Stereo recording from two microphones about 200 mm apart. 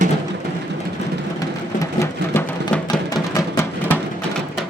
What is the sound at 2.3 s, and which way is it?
Music, 10° left (ahead or behind).